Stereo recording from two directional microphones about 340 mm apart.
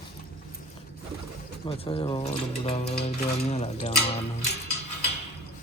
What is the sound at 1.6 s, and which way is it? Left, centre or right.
Speech, centre.